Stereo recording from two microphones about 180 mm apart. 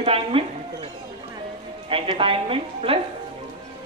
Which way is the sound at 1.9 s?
30° right (ahead or behind).